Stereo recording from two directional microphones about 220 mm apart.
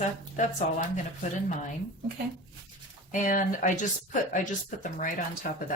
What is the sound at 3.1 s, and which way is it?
A woman's voice, 35° left (ahead or behind).